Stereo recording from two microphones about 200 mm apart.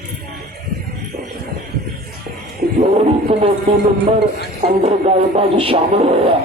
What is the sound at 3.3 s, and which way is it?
Speech, 30° right (ahead or behind).